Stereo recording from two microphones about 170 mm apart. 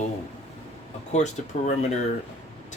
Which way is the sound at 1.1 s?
45° left (ahead or behind).